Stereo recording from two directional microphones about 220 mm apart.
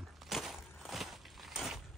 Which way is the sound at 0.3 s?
Centre (ahead or behind).